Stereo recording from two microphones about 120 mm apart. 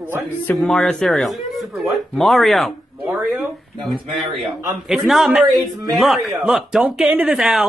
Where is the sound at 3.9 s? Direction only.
Centre (ahead or behind).